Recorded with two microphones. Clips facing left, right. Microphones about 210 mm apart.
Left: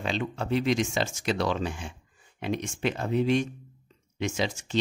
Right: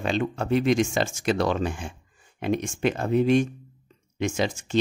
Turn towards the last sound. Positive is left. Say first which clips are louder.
# right 4 dB
turn(degrees=-50)  # may be behind; listen again after turning